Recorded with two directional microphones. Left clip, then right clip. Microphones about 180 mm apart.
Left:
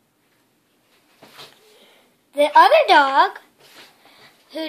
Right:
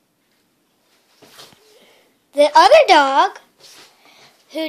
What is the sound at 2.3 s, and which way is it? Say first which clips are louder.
A woman's voice: right 3 dB; 30° right (ahead or behind).